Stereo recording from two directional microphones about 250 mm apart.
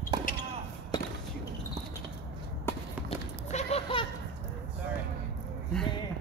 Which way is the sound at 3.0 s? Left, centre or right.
Left.